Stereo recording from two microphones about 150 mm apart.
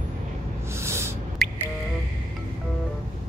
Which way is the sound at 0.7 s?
15° right (ahead or behind).